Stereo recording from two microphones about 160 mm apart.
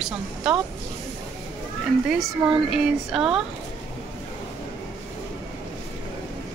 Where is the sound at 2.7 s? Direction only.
5° right (ahead or behind).